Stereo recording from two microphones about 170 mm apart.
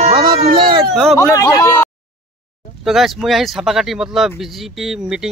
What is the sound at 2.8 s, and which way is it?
Speech, centre (ahead or behind).